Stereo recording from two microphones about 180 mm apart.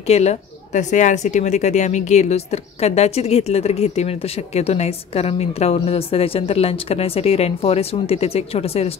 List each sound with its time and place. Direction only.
0.0 s a woman's voice: 35° left (ahead or behind)